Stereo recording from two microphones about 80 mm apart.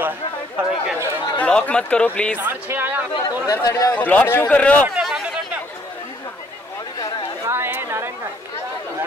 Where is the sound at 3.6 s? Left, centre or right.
Left.